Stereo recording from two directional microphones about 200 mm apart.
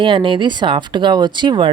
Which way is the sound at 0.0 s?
25° right (ahead or behind).